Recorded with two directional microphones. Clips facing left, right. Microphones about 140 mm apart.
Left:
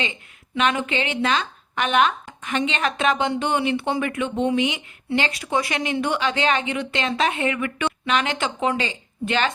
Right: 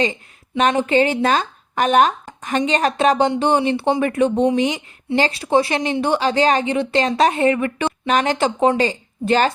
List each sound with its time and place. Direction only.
0.0 s a woman's voice: 40° right (ahead or behind)